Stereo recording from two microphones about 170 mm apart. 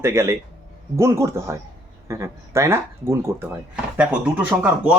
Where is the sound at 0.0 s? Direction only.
15° right (ahead or behind).